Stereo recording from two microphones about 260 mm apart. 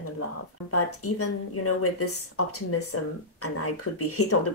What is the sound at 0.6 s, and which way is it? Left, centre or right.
Speech, left.